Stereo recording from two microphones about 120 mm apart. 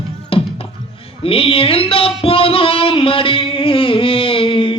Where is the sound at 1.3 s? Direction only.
50° left (ahead or behind).